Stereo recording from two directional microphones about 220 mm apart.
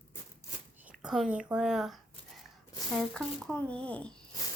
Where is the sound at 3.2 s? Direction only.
5° left (ahead or behind).